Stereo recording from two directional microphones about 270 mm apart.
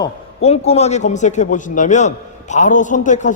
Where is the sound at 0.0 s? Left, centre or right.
Left.